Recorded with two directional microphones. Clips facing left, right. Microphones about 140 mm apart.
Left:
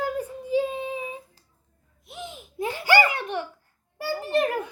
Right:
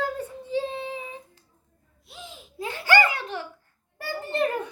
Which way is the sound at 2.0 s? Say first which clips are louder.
Left 5 dB; 20° left (ahead or behind).